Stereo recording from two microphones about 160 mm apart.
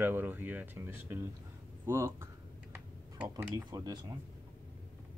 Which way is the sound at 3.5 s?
25° right (ahead or behind).